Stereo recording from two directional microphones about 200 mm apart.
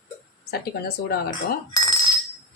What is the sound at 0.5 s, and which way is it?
Speech, 50° left (ahead or behind).